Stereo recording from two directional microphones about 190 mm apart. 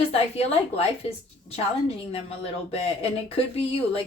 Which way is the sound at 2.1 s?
30° left (ahead or behind).